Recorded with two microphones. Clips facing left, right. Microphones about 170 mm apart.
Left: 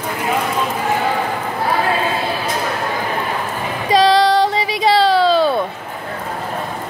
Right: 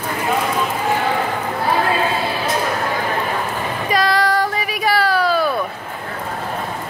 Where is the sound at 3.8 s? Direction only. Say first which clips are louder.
Left 6 dB; 90° left.